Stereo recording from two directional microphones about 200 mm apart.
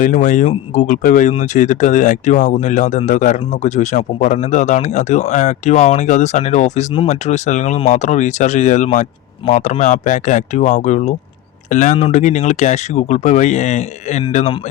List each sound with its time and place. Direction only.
0.0 s speech: 40° left (ahead or behind)